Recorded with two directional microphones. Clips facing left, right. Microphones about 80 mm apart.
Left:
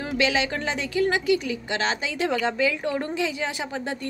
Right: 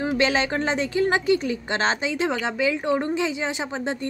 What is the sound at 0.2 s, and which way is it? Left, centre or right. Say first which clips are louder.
A woman's voice: even; right.